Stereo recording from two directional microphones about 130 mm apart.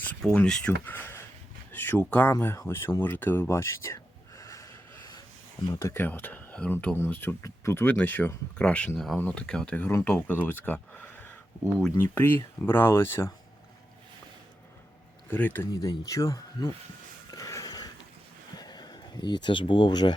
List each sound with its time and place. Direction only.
0.2 s speech: 5° left (ahead or behind)
2.3 s a sound: 20° left (ahead or behind)
5.7 s speech: 20° left (ahead or behind)
12.1 s speech: 15° left (ahead or behind)
15.3 s speech: 15° left (ahead or behind)
15.7 s speech: 30° left (ahead or behind)
17.3 s a sound: 25° left (ahead or behind)
18.6 s speech: 30° left (ahead or behind)